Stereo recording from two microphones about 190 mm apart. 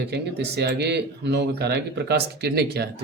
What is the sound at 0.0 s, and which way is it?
Speech, 60° right (ahead or behind).